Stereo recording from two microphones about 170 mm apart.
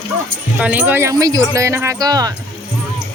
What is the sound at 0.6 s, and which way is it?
Speech, 10° right (ahead or behind).